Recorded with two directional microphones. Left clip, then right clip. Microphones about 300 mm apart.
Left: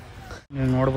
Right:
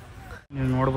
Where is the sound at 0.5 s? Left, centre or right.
Centre.